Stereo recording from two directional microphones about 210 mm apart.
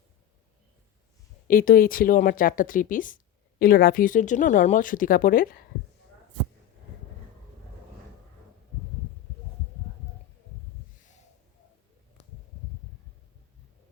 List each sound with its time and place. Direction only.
1.5 s speech: 45° left (ahead or behind)